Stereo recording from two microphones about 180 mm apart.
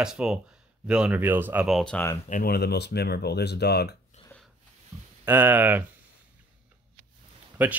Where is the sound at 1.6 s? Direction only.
Centre (ahead or behind).